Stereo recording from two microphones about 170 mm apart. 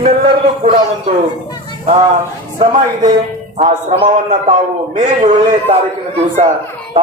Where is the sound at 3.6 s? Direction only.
45° right (ahead or behind).